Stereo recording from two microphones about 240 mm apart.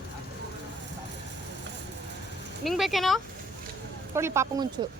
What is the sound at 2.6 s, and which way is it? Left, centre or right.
Speech, centre.